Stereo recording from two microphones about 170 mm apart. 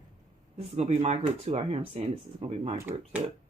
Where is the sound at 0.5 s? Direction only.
40° right (ahead or behind).